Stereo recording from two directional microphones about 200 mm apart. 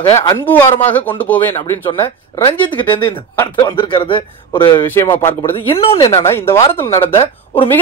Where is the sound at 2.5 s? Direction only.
25° left (ahead or behind).